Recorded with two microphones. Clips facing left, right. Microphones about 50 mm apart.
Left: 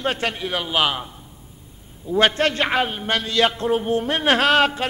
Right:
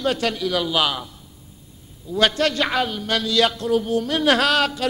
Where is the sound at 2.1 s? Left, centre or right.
Left.